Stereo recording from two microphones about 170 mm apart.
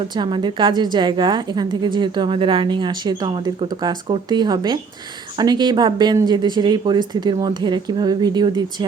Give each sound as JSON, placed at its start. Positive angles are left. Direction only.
{"t": 0.2, "sound": "a woman's voice", "side_deg": -25}